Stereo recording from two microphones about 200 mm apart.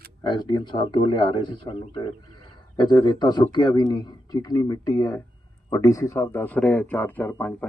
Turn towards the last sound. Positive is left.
turn(degrees=10)  # may be behind; listen again after turning